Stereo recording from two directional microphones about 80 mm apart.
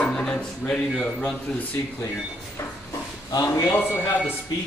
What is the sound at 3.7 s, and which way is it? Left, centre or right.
Speech, left.